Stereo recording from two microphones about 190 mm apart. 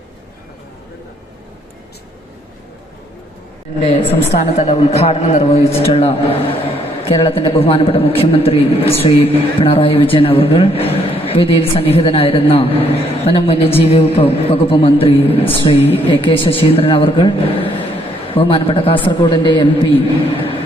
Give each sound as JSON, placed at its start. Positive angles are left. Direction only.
{"t": 3.8, "sound": "a woman's voice", "side_deg": 30}